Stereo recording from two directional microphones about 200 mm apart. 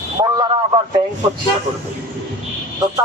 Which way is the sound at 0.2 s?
20° right (ahead or behind).